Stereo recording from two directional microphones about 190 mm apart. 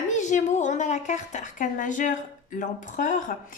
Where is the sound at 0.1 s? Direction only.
40° left (ahead or behind).